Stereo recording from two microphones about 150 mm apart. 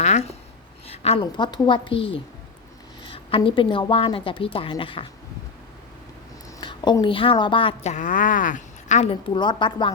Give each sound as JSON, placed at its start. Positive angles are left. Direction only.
{"t": 0.0, "sound": "writing", "side_deg": 50}
{"t": 0.9, "sound": "a sound", "side_deg": 40}
{"t": 1.2, "sound": "a woman's voice", "side_deg": 30}
{"t": 6.6, "sound": "a woman's voice", "side_deg": 30}
{"t": 7.9, "sound": "a woman's voice", "side_deg": 60}
{"t": 9.3, "sound": "a woman's voice", "side_deg": 30}